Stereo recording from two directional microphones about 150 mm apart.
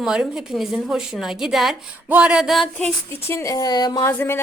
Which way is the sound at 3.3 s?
20° left (ahead or behind).